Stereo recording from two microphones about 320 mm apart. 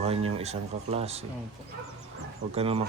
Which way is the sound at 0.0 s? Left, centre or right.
Centre.